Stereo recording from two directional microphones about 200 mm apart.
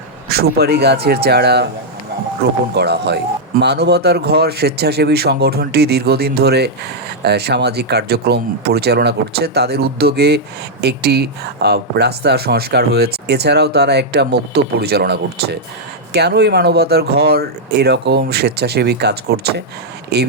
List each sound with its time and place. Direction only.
0.3 s speech: 50° right (ahead or behind)
2.7 s speech: 55° right (ahead or behind)